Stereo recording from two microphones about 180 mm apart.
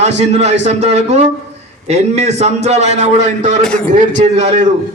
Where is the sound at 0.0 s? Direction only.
40° right (ahead or behind).